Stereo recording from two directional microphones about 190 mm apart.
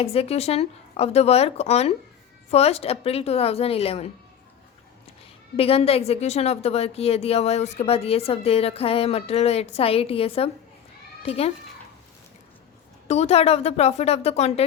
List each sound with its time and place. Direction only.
0.0 s a woman's voice: 30° left (ahead or behind)
5.5 s a woman's voice: 30° left (ahead or behind)
13.1 s a woman's voice: 35° left (ahead or behind)